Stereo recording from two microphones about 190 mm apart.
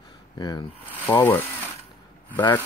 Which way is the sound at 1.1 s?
10° left (ahead or behind).